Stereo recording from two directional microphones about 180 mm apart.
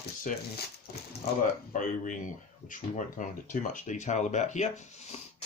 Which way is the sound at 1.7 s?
45° left (ahead or behind).